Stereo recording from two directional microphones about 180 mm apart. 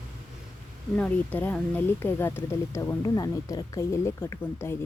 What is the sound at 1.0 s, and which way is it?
A woman's voice, 10° left (ahead or behind).